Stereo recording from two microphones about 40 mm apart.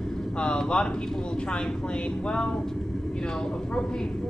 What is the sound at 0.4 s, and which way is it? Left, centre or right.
Speech, left.